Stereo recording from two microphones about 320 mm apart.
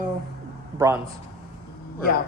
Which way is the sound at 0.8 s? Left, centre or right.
Centre.